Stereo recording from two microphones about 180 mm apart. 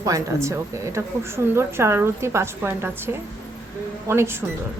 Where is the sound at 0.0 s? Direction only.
15° right (ahead or behind).